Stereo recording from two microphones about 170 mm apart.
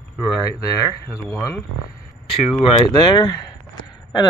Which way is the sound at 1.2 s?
15° left (ahead or behind).